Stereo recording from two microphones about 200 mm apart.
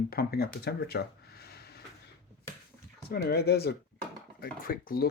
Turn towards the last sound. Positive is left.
turn(degrees=45)  # may be behind; listen again after turning